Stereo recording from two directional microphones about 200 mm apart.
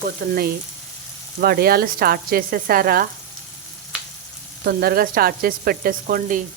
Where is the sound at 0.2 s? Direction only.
50° right (ahead or behind).